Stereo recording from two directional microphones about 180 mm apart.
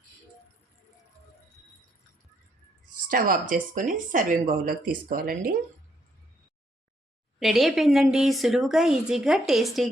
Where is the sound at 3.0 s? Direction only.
50° right (ahead or behind).